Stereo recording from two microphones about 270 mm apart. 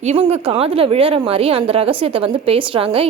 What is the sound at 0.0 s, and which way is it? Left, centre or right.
Speech, right.